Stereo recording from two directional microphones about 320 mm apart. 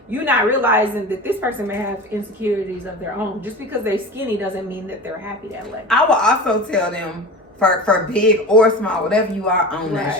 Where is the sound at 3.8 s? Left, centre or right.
Centre.